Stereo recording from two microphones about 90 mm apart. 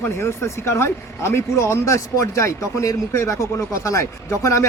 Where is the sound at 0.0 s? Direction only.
30° left (ahead or behind).